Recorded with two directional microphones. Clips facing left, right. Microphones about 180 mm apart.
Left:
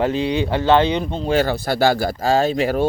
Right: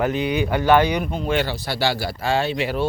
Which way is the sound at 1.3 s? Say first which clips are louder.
Left 6 dB; 45° left (ahead or behind).